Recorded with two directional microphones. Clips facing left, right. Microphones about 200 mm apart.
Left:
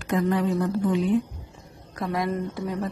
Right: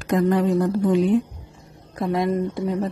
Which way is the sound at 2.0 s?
25° right (ahead or behind).